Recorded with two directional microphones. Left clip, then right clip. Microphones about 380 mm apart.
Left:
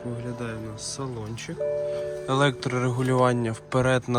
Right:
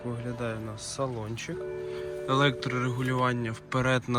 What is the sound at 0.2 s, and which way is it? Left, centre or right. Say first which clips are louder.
Speech: left 1 dB; centre.